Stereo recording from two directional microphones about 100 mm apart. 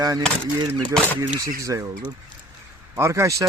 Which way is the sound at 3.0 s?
30° right (ahead or behind).